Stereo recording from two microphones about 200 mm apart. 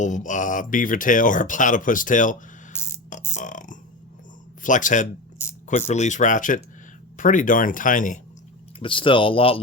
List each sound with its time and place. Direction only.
0.0 s speech: 40° left (ahead or behind)
3.3 s speech: 40° left (ahead or behind)
8.8 s speech: 25° left (ahead or behind)